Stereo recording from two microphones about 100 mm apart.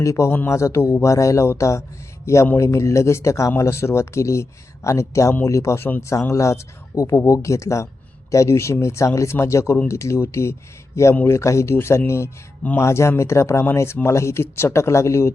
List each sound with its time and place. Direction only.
0.0 s speech: 30° left (ahead or behind)